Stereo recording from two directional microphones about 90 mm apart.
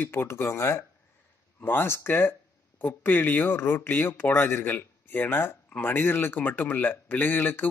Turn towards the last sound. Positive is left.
turn(degrees=20)  # may be behind; listen again after turning